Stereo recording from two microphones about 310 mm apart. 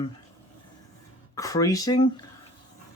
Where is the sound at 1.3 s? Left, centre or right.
Centre.